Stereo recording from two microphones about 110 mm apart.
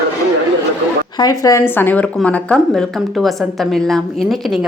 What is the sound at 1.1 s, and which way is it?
Speech, 35° left (ahead or behind).